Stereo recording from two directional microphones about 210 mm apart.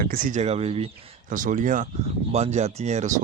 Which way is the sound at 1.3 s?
40° right (ahead or behind).